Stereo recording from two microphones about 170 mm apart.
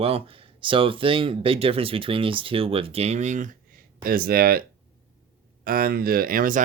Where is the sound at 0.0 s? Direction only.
35° right (ahead or behind); by 4.6 s 60° right (ahead or behind).